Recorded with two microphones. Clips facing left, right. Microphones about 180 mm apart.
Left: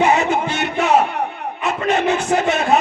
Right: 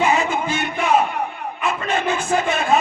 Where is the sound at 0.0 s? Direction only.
70° left (ahead or behind).